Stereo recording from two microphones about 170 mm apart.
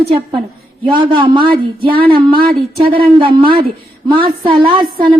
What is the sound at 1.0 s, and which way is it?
Speech, 30° right (ahead or behind).